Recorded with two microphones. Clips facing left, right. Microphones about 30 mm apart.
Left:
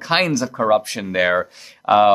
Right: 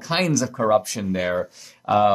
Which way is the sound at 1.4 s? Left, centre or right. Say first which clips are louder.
Left 5 dB; left.